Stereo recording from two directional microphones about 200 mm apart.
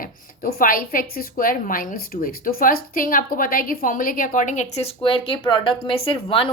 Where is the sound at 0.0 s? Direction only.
45° left (ahead or behind).